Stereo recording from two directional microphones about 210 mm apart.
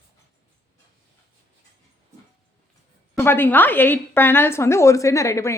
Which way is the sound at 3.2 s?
10° left (ahead or behind).